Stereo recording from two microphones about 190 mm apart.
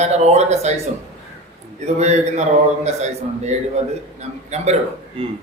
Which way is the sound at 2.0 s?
35° right (ahead or behind).